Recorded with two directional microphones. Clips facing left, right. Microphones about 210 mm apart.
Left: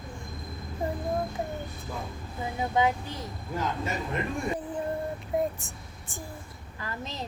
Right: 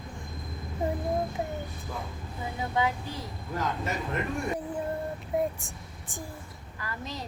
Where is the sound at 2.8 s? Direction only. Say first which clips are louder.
Left 3 dB; 20° left (ahead or behind).